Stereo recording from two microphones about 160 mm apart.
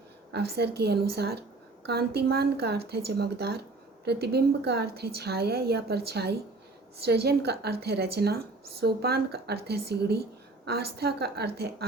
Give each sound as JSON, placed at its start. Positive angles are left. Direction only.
{"t": 0.3, "sound": "a woman's voice", "side_deg": -90}